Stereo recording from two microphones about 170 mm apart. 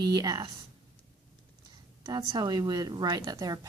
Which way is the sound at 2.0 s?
25° right (ahead or behind).